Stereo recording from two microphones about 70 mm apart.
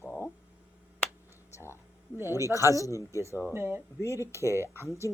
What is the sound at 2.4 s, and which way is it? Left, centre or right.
Speech, left.